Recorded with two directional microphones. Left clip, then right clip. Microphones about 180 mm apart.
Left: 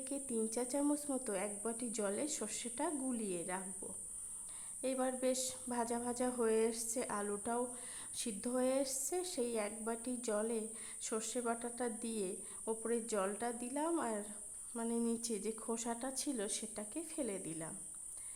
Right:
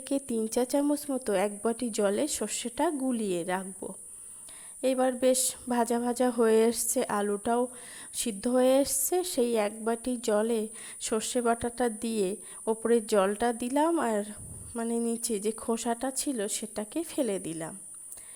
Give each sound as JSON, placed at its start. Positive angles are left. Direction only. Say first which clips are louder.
{"t": 0.0, "sound": "a woman's voice", "louder": "right 10 dB", "side_deg": -35}